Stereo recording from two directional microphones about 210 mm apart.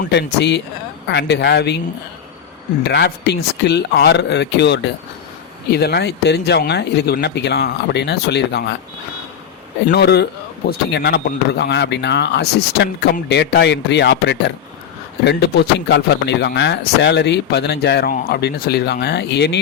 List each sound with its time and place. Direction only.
0.1 s speech: 55° left (ahead or behind)
2.8 s speech: 50° left (ahead or behind)
9.9 s speech: 50° left (ahead or behind)